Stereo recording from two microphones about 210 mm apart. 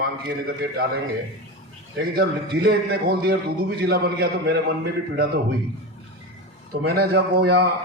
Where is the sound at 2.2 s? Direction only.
45° right (ahead or behind).